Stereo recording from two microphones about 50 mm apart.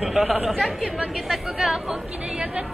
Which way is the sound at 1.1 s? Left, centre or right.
Centre.